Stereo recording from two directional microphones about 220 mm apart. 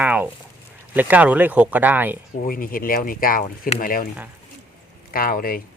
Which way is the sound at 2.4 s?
40° left (ahead or behind).